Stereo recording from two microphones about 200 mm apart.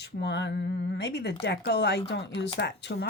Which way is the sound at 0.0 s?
55° left (ahead or behind).